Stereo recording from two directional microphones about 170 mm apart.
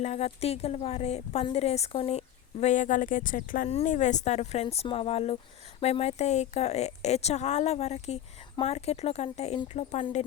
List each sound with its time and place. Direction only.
0.0 s speech: 40° left (ahead or behind)
3.7 s speech: 40° left (ahead or behind)